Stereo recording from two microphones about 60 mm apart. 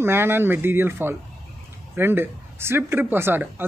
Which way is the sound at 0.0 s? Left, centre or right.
Right.